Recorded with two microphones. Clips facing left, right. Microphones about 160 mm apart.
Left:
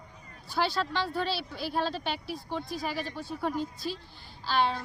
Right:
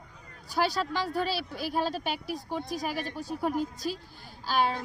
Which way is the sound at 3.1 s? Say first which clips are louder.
Right 2 dB; 40° right (ahead or behind).